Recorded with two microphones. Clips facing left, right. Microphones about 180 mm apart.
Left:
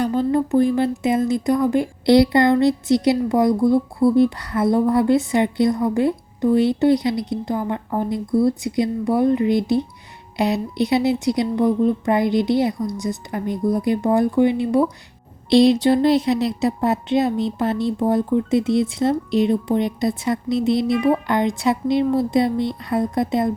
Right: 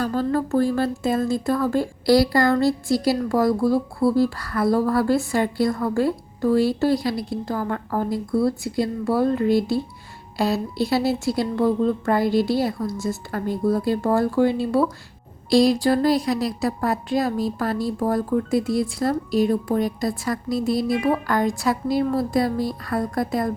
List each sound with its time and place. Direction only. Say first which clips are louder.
0.0 s a woman's voice: left 3 dB; 20° left (ahead or behind)